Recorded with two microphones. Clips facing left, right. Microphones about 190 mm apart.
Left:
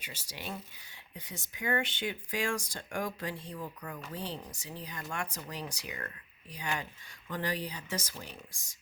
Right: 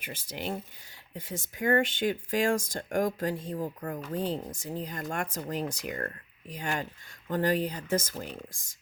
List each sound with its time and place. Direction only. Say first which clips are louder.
0.0 s speech: right 8 dB; 55° right (ahead or behind)